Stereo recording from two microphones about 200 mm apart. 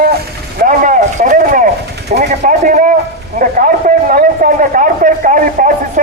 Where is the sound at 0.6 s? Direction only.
40° right (ahead or behind).